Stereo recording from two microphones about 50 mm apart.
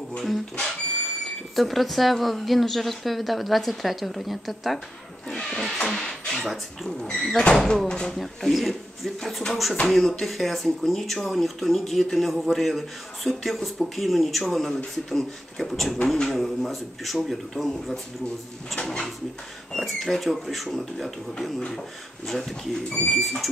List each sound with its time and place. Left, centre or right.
0.2 s speech: centre
5.3 s speech: centre
8.2 s speech: centre